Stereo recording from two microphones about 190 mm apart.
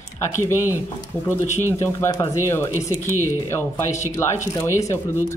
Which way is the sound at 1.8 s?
15° left (ahead or behind).